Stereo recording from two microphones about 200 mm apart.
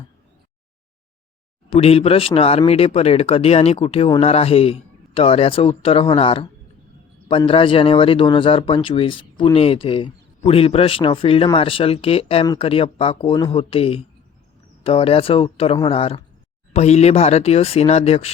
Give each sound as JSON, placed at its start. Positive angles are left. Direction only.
{"t": 1.7, "sound": "speech", "side_deg": 30}